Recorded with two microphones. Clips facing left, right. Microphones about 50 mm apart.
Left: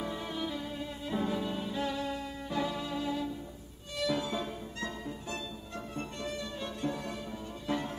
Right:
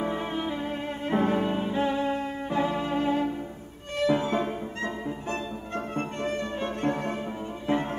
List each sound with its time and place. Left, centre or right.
0.0 s music: right
1.0 s music: right
7.6 s music: right